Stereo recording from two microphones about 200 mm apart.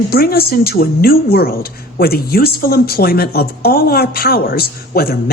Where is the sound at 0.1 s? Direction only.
50° left (ahead or behind).